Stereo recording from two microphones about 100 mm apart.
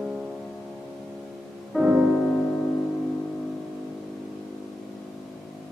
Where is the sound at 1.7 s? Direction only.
10° right (ahead or behind).